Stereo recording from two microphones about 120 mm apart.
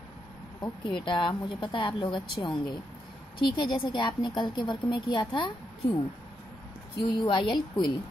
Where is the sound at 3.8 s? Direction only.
40° left (ahead or behind).